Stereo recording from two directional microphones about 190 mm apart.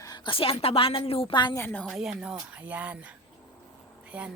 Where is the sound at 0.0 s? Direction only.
20° left (ahead or behind).